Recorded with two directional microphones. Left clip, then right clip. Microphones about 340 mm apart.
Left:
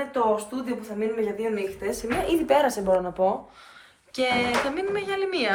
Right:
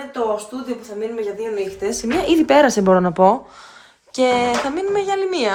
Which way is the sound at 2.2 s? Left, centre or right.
Right.